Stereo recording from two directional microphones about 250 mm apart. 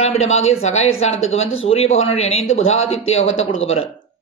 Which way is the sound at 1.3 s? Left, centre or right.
Left.